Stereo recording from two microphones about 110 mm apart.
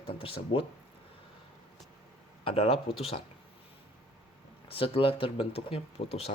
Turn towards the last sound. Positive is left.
turn(degrees=65)  # may be behind; listen again after turning